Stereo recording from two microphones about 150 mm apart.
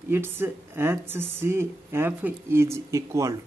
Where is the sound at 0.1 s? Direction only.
15° right (ahead or behind).